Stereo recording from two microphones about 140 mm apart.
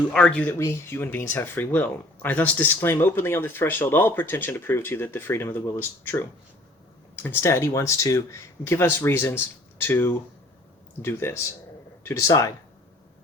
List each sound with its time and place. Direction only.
0.1 s speech: 5° left (ahead or behind); by 12.5 s 25° left (ahead or behind)